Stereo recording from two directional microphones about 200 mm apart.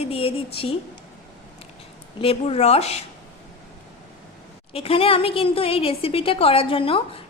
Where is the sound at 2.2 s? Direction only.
30° left (ahead or behind).